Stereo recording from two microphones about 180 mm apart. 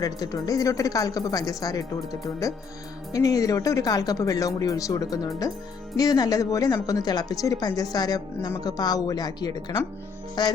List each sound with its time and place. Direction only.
0.0 s a woman's voice: 20° left (ahead or behind)